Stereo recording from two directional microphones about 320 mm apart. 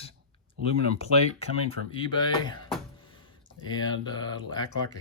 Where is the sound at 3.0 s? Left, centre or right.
Centre.